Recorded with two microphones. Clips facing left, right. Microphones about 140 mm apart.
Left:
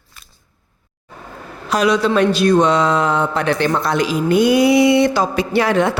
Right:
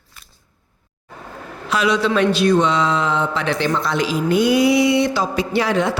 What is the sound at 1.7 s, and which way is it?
Speech, 45° left (ahead or behind).